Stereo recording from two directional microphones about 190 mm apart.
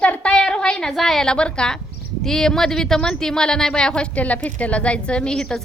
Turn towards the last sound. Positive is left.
turn(degrees=5)  # may be behind; listen again after turning